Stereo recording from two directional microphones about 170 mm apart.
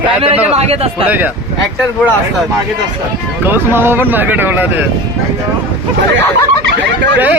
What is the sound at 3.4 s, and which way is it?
Speech, 10° right (ahead or behind).